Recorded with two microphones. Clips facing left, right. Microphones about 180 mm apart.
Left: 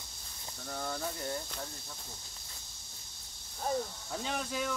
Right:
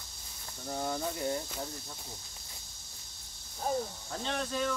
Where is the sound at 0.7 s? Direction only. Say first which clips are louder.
Right 4 dB; 20° right (ahead or behind).